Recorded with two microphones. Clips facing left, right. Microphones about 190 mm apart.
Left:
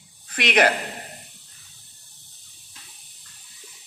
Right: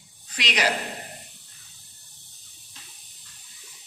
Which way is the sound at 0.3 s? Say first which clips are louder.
Left 7 dB; 55° left (ahead or behind).